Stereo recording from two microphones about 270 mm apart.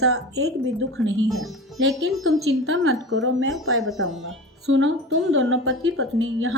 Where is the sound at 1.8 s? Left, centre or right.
Right.